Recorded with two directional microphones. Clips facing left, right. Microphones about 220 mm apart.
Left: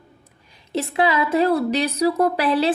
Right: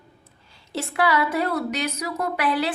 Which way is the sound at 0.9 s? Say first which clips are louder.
Left 3 dB; 20° left (ahead or behind).